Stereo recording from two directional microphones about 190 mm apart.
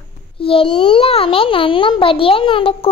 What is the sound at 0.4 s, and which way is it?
A child's voice, 30° left (ahead or behind).